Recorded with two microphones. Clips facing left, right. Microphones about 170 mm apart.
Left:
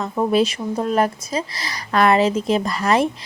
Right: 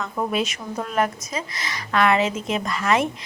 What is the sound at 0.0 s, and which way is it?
Speech, 35° left (ahead or behind).